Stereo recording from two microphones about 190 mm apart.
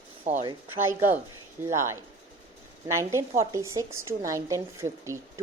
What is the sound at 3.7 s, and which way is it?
Speech, 15° right (ahead or behind).